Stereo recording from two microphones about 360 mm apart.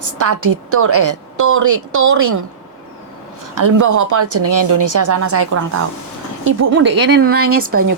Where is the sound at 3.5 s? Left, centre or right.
Right.